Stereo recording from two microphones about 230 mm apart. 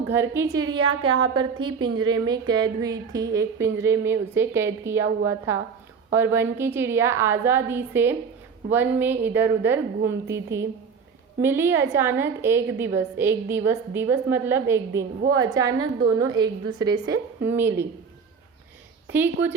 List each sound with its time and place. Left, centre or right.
0.1 s a woman's voice: centre
1.1 s a woman's voice: right
1.4 s a woman's voice: centre
19.1 s a woman's voice: centre